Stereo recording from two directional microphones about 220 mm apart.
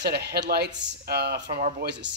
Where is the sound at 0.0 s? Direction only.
45° right (ahead or behind).